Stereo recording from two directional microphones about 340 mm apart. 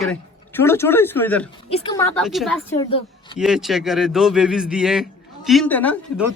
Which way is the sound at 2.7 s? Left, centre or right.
Centre.